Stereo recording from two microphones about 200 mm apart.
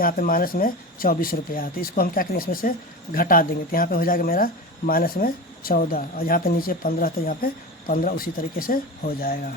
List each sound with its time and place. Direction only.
0.0 s speech: 45° left (ahead or behind)